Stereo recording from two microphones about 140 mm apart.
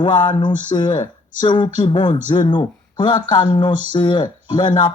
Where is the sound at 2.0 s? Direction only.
60° left (ahead or behind).